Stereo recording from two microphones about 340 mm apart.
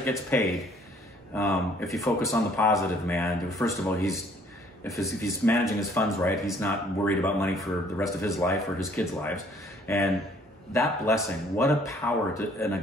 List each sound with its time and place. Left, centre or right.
0.0 s speech: centre